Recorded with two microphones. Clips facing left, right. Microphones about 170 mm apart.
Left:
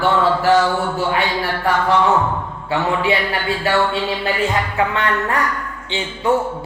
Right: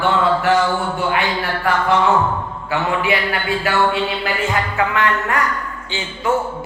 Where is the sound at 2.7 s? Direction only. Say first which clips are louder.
Left 1 dB; 30° left (ahead or behind).